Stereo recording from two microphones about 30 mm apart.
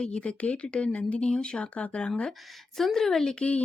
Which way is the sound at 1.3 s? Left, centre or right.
Left.